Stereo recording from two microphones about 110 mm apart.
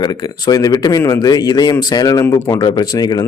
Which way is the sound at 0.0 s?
35° left (ahead or behind).